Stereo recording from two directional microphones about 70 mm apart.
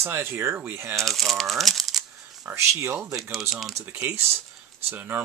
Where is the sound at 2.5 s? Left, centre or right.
Right.